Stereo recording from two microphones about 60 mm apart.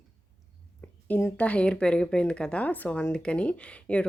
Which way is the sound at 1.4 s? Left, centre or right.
Centre.